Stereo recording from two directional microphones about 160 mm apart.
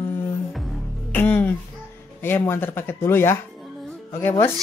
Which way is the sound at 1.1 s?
10° left (ahead or behind).